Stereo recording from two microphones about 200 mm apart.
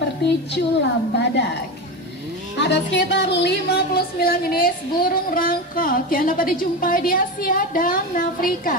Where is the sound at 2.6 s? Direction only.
60° left (ahead or behind).